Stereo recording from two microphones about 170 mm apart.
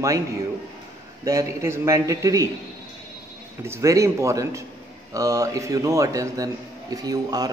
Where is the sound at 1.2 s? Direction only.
15° right (ahead or behind).